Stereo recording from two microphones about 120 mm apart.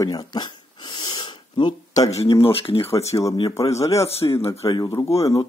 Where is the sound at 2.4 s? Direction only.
50° left (ahead or behind).